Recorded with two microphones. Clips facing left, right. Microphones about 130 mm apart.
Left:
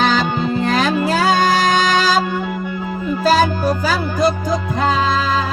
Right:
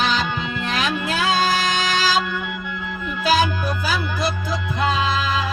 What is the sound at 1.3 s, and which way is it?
Music, 50° left (ahead or behind).